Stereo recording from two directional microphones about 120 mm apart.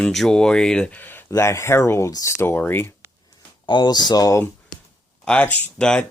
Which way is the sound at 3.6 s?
40° left (ahead or behind).